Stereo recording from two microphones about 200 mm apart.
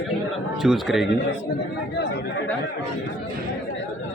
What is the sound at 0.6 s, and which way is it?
Speech, centre (ahead or behind).